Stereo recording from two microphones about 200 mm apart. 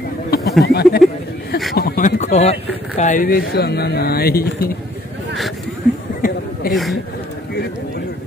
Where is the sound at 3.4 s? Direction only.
55° left (ahead or behind).